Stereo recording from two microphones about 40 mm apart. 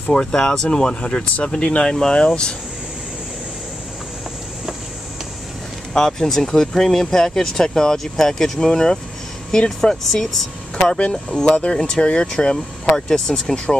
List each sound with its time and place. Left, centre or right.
0.1 s speech: centre
5.9 s speech: centre
12.9 s speech: centre